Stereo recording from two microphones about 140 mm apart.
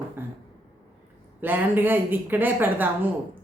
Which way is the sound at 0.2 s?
15° right (ahead or behind).